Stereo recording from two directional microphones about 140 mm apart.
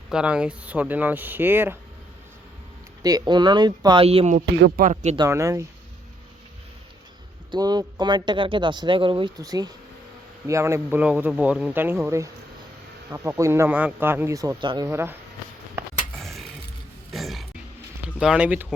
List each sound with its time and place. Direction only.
0.1 s speech: 5° right (ahead or behind)
3.0 s speech: 30° right (ahead or behind)
4.0 s speech: 45° right (ahead or behind)
4.3 s speech: 75° right (ahead or behind)
5.1 s speech: 25° right (ahead or behind)
7.5 s speech: 30° right (ahead or behind)
9.4 s speech: 25° right (ahead or behind)
16.1 s a sound: centre (ahead or behind)
17.1 s music: centre (ahead or behind)
18.2 s speech: 10° right (ahead or behind)